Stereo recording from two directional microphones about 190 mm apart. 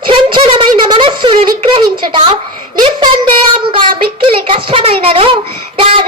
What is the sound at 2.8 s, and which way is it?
Child singing, 25° right (ahead or behind).